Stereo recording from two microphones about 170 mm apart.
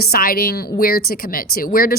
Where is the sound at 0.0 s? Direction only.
60° left (ahead or behind).